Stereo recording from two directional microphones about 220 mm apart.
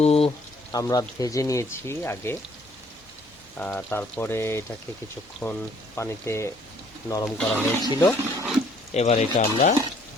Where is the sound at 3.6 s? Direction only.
10° left (ahead or behind).